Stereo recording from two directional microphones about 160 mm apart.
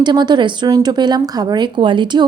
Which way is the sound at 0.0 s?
30° right (ahead or behind).